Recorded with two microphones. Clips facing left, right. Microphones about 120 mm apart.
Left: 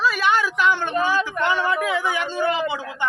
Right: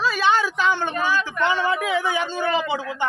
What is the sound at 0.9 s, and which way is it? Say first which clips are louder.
Speech: left 2 dB; 25° left (ahead or behind).